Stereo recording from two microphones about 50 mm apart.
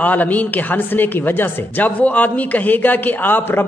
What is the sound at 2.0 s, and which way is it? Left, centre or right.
A woman's voice, left.